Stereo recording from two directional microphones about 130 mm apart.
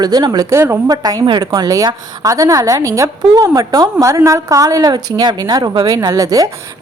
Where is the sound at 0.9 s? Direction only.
30° right (ahead or behind).